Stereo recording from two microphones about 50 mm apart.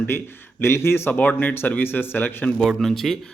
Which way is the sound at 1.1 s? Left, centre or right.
Left.